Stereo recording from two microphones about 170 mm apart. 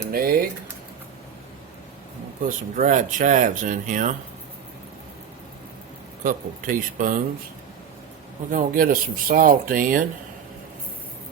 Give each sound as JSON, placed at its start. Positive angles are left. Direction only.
{"t": 0.1, "sound": "speech", "side_deg": -60}
{"t": 2.5, "sound": "speech", "side_deg": -50}
{"t": 6.2, "sound": "speech", "side_deg": -50}
{"t": 8.4, "sound": "speech", "side_deg": -55}